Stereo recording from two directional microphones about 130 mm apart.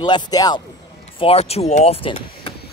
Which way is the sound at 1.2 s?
50° left (ahead or behind).